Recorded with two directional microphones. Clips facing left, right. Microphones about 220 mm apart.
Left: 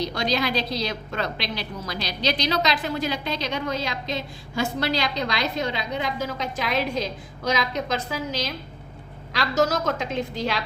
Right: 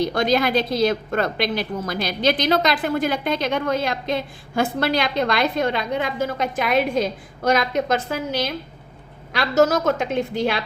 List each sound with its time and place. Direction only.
0.0 s a woman's voice: 50° right (ahead or behind)